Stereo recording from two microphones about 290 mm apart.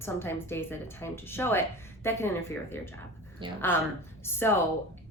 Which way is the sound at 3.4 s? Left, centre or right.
Centre.